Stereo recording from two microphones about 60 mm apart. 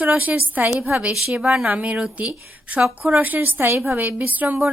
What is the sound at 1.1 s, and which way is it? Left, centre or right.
Speech, centre.